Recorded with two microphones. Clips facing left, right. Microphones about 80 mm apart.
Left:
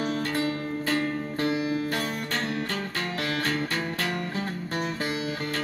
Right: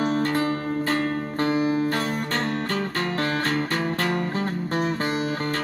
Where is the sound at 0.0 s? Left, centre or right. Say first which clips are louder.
Right 5 dB; right.